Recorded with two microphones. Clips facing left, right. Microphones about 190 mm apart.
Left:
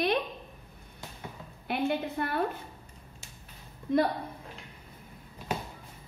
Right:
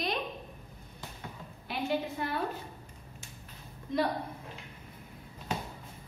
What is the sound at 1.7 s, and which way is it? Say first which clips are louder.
Speech: left 3 dB; 60° left (ahead or behind).